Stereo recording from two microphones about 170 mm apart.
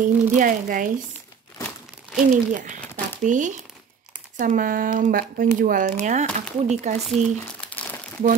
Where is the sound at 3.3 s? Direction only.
45° right (ahead or behind).